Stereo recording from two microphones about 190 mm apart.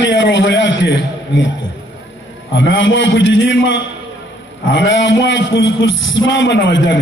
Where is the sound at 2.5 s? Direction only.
75° left (ahead or behind).